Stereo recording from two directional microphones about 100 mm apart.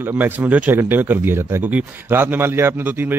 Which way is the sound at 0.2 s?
15° right (ahead or behind).